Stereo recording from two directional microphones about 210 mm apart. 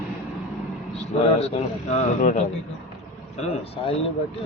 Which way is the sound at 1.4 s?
30° left (ahead or behind).